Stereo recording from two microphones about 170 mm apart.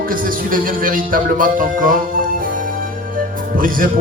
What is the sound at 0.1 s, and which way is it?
Music, 55° right (ahead or behind).